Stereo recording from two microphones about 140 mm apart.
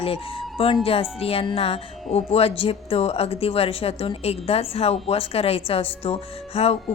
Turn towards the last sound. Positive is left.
turn(degrees=45)  # may be behind; listen again after turning